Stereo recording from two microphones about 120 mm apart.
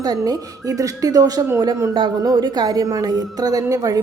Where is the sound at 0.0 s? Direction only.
35° right (ahead or behind).